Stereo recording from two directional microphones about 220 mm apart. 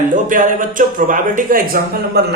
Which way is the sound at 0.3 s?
35° right (ahead or behind).